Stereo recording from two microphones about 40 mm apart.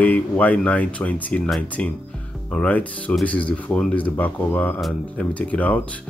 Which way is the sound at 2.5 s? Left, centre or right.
Left.